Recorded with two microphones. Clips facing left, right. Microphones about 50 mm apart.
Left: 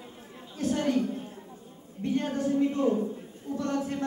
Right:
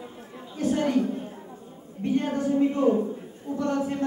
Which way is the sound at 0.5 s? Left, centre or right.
Centre.